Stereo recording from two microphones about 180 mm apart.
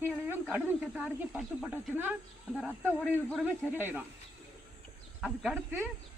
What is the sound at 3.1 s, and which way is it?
Speech, 10° left (ahead or behind).